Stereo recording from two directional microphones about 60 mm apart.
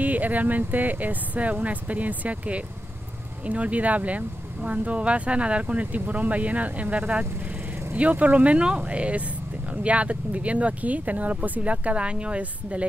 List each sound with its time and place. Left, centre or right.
0.0 s speech: right